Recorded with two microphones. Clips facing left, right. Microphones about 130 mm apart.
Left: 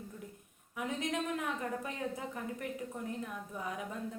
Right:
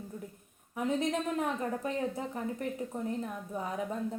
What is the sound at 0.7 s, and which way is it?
A woman's voice, 35° right (ahead or behind).